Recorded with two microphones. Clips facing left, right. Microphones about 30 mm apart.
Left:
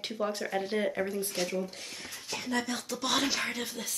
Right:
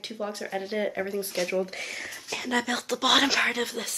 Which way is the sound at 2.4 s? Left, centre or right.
Right.